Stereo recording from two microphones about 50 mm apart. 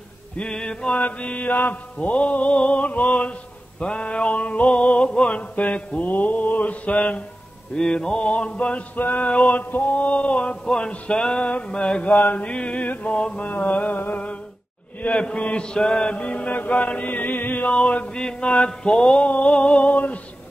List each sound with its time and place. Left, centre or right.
0.4 s music: centre
0.9 s music: left
7.7 s music: centre
12.1 s mantra: left
13.9 s humming: left
15.0 s chant: left
15.5 s music: centre; by 17.6 s left
17.6 s music: left